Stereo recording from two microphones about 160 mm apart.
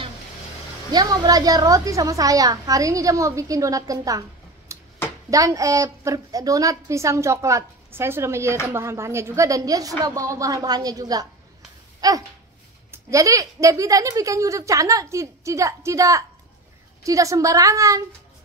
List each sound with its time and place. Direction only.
0.9 s a woman's voice: 25° right (ahead or behind)
4.7 s a sound: 20° right (ahead or behind)
5.3 s a woman's voice: 20° right (ahead or behind)